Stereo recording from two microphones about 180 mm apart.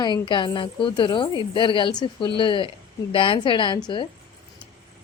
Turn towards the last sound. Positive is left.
turn(degrees=25)  # may be behind; listen again after turning